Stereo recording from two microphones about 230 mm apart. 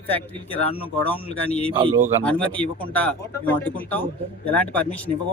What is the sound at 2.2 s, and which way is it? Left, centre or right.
Speech, centre.